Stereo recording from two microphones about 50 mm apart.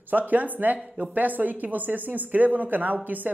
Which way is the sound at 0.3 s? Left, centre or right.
Right.